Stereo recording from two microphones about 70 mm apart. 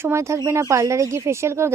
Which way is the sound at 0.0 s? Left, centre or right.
Right.